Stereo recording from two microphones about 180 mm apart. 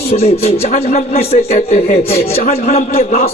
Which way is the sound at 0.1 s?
35° left (ahead or behind).